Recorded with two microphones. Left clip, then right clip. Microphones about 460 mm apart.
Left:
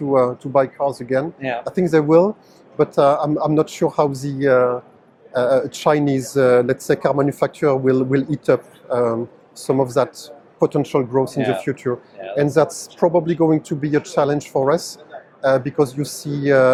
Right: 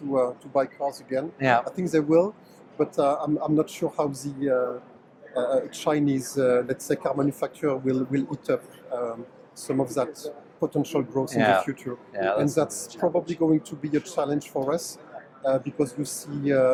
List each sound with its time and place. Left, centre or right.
0.1 s speech: left
1.4 s speech: right
1.6 s speech: left
11.3 s speech: right
11.6 s speech: left